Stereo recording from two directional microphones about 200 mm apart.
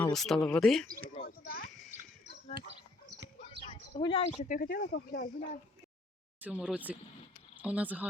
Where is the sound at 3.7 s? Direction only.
25° left (ahead or behind).